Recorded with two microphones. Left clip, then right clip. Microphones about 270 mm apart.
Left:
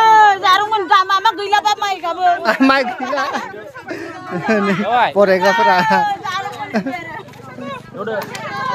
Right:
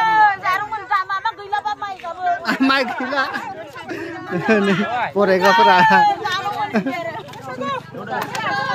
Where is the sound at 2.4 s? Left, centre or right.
Centre.